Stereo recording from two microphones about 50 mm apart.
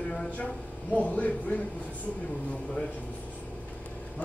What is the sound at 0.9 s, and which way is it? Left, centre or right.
Speech, left.